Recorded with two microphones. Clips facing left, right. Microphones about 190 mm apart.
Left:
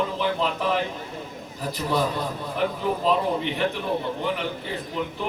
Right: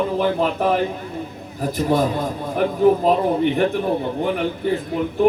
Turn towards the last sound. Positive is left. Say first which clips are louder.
# right 8 dB
turn(degrees=-50)  # may be behind; listen again after turning